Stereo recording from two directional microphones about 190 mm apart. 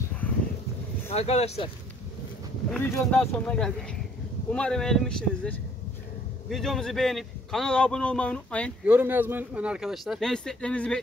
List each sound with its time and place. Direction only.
1.1 s speech: 35° left (ahead or behind)
2.7 s a man's voice: 5° left (ahead or behind)
8.8 s a man's voice: 10° right (ahead or behind); by 11.0 s 5° left (ahead or behind)